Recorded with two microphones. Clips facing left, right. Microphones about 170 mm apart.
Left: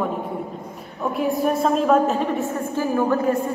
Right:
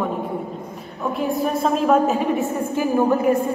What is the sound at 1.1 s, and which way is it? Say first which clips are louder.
A woman's voice: left 1 dB; 5° left (ahead or behind).